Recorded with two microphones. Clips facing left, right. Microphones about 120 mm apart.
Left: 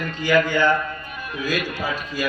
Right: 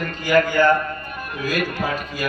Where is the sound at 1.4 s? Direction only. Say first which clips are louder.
Right 2 dB; 45° right (ahead or behind).